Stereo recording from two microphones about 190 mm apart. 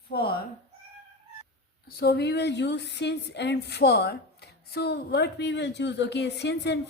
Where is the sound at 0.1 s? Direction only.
55° left (ahead or behind).